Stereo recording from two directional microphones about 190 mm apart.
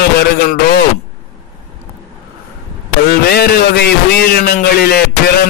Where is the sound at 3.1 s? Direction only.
55° left (ahead or behind).